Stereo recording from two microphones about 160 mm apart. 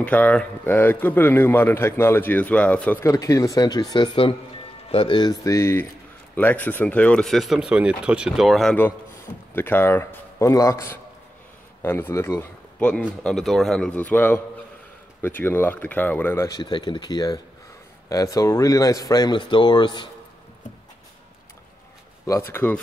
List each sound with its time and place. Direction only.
0.0 s a man's voice: 10° left (ahead or behind)
9.6 s a man's voice: 15° left (ahead or behind)
22.2 s a man's voice: 15° left (ahead or behind)